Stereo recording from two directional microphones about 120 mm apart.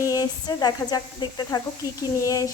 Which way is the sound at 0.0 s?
30° left (ahead or behind).